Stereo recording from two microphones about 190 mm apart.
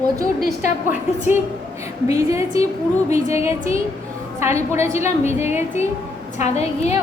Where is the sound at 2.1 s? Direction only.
15° right (ahead or behind).